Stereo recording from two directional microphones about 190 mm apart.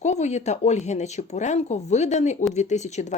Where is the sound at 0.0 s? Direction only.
35° left (ahead or behind).